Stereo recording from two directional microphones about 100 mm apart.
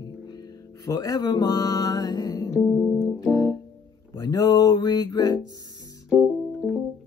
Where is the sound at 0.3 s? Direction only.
40° left (ahead or behind).